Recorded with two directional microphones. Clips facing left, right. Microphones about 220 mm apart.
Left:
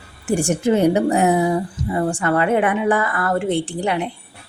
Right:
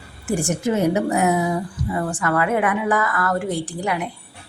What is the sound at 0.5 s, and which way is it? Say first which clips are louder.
A woman's voice: left 4 dB; 30° left (ahead or behind).